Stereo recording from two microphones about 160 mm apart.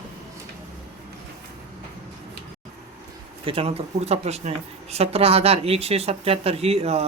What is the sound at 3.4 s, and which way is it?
Speech, 35° right (ahead or behind).